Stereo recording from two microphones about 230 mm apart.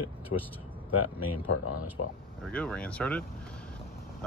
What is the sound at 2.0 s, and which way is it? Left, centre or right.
Speech, left.